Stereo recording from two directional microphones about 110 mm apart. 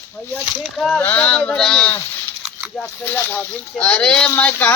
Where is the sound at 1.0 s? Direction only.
15° left (ahead or behind).